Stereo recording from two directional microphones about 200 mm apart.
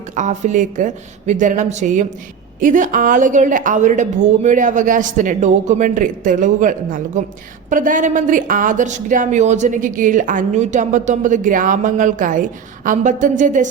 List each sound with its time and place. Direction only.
0.2 s a woman's voice: 35° right (ahead or behind)